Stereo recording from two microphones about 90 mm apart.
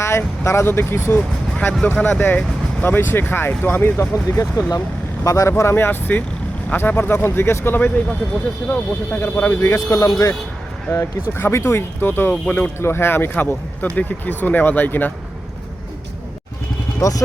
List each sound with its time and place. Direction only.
0.0 s speech: 30° left (ahead or behind)
2.0 s speech: 10° left (ahead or behind)
2.8 s speech: 25° left (ahead or behind)
4.3 s speech: 35° left (ahead or behind)
9.6 s speech: 35° left (ahead or behind); by 12.7 s 15° left (ahead or behind)
12.8 s speech: 25° left (ahead or behind)
17.0 s speech: 35° left (ahead or behind)